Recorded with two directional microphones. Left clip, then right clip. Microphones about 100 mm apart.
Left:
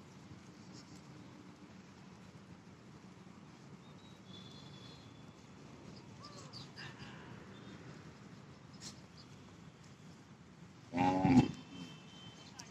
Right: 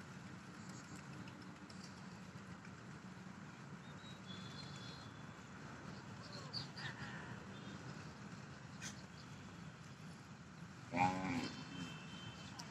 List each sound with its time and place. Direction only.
6.5 s duck: 25° left (ahead or behind)
7.1 s vehicle: 30° right (ahead or behind)
10.9 s livestock: 30° left (ahead or behind)